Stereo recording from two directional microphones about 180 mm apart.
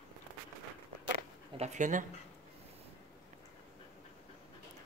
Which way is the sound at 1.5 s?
40° right (ahead or behind).